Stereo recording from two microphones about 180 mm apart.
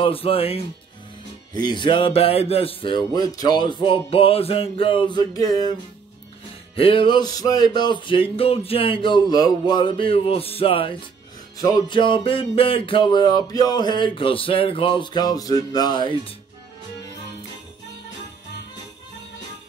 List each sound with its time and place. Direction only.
0.0 s speech: 30° left (ahead or behind)
1.5 s music: 25° left (ahead or behind)